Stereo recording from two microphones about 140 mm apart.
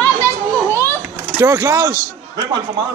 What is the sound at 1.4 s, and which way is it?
Speech, 20° right (ahead or behind).